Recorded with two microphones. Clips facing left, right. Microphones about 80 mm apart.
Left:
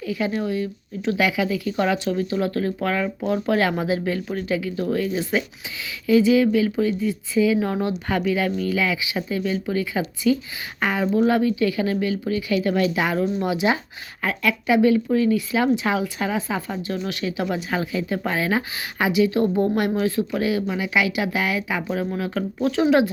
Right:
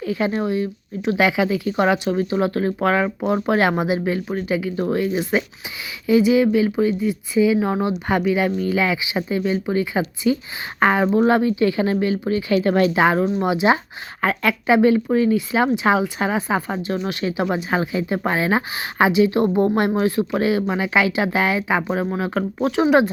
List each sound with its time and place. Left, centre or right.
0.0 s speech: right
10.8 s speech: right
14.2 s speech: right